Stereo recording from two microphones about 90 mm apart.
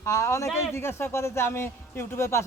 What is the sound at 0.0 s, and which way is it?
Speech, 35° left (ahead or behind).